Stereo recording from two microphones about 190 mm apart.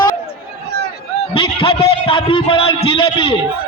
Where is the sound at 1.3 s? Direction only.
30° left (ahead or behind).